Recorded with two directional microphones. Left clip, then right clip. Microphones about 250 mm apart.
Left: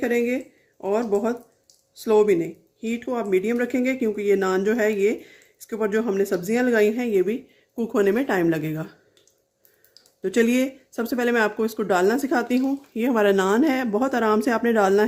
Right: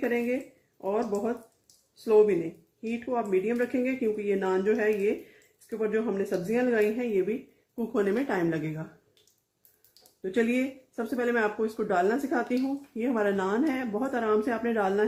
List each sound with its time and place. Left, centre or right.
0.0 s speech: left
10.3 s speech: left